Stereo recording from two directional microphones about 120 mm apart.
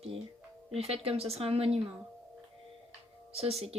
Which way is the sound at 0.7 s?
55° right (ahead or behind).